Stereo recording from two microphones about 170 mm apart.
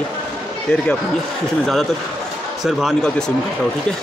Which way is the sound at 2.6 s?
Centre (ahead or behind).